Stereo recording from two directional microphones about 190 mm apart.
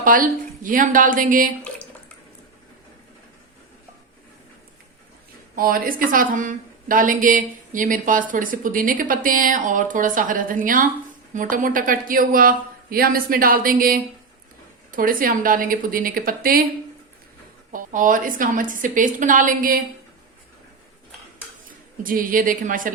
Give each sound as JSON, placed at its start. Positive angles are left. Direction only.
{"t": 0.0, "sound": "a woman's voice", "side_deg": -45}
{"t": 5.5, "sound": "a woman's voice", "side_deg": -50}
{"t": 17.7, "sound": "a woman's voice", "side_deg": -45}
{"t": 22.0, "sound": "a woman's voice", "side_deg": -45}